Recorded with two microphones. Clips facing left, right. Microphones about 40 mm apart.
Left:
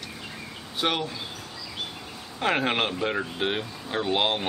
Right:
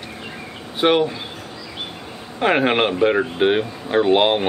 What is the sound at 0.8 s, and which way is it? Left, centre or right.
Speech, right.